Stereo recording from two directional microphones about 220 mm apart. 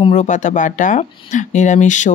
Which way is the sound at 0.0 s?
30° left (ahead or behind).